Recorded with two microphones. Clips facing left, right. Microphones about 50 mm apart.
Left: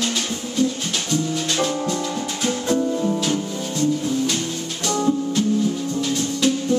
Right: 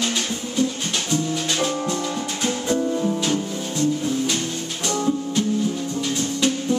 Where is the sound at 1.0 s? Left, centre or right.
Centre.